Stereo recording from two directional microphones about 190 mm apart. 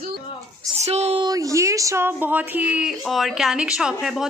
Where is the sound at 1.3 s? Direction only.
15° right (ahead or behind); by 4.2 s centre (ahead or behind).